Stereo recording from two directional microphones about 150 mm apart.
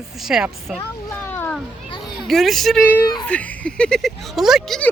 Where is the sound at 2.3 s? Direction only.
Centre (ahead or behind).